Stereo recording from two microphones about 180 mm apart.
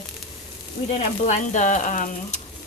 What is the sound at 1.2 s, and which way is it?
Speech, 40° left (ahead or behind).